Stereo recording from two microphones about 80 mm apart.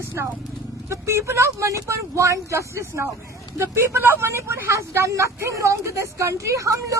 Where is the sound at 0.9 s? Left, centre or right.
Right.